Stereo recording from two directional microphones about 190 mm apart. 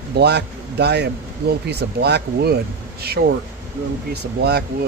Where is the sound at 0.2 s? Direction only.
60° right (ahead or behind).